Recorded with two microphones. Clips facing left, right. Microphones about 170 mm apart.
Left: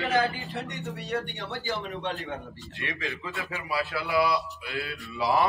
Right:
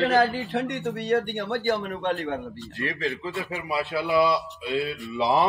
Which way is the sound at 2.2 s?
40° right (ahead or behind).